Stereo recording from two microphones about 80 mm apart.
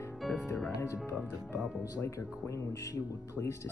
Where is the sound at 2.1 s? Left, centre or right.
Left.